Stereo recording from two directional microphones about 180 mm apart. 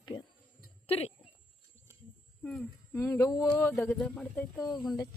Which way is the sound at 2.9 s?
15° left (ahead or behind).